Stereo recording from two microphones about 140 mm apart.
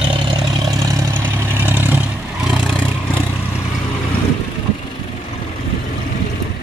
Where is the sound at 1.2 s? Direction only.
15° right (ahead or behind).